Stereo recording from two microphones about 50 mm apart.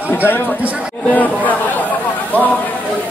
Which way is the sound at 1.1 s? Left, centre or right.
Left.